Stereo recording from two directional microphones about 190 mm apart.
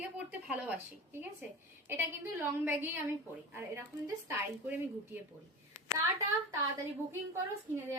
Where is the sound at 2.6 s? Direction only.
10° right (ahead or behind).